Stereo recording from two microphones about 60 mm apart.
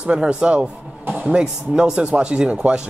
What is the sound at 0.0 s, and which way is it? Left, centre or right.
Speech, centre.